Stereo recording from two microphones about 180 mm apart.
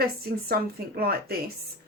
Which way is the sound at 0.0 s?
60° right (ahead or behind).